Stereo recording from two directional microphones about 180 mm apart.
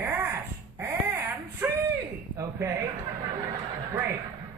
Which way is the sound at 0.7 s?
15° right (ahead or behind).